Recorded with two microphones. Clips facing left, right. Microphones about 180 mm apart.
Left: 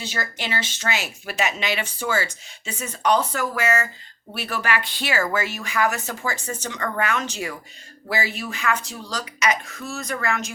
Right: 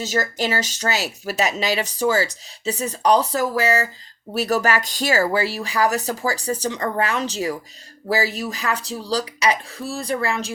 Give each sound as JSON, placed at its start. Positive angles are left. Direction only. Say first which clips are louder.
{"t": 0.0, "sound": "speech", "louder": "right 7 dB", "side_deg": -40}